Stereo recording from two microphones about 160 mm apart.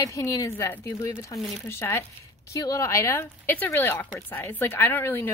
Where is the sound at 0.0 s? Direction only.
20° left (ahead or behind).